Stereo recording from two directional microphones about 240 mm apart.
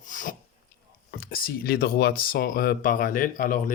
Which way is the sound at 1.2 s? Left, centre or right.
Left.